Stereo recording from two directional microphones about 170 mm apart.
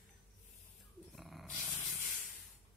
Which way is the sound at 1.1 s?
Centre (ahead or behind).